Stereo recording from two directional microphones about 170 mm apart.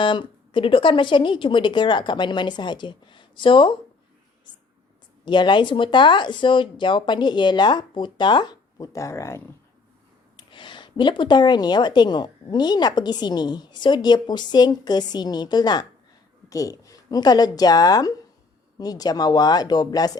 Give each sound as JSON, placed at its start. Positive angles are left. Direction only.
{"t": 0.0, "sound": "a woman's voice", "side_deg": 30}
{"t": 5.2, "sound": "a woman's voice", "side_deg": 25}
{"t": 10.3, "sound": "a woman's voice", "side_deg": 30}